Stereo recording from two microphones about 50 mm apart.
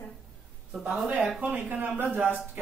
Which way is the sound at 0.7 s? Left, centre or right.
Centre.